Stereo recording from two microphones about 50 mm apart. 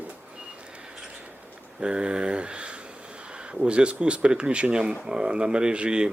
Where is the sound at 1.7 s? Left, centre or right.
Centre.